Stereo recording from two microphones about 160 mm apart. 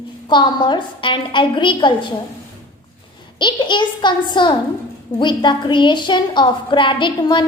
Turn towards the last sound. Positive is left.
turn(degrees=30)  # may be behind; listen again after turning